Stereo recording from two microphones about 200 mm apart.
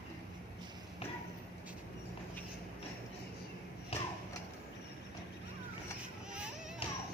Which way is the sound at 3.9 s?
30° left (ahead or behind).